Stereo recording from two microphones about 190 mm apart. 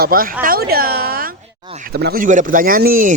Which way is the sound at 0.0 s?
50° right (ahead or behind).